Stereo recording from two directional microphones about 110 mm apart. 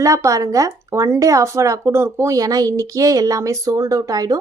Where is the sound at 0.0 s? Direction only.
30° right (ahead or behind).